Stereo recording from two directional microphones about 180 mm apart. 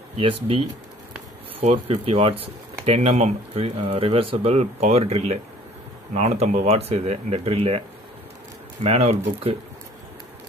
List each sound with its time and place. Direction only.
0.2 s speech: 30° right (ahead or behind)
8.8 s speech: 35° right (ahead or behind)